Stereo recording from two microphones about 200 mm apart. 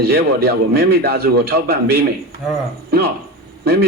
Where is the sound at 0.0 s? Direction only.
50° right (ahead or behind).